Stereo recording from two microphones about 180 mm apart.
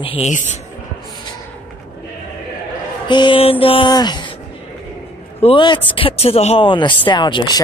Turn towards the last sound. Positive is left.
turn(degrees=25)  # may be behind; listen again after turning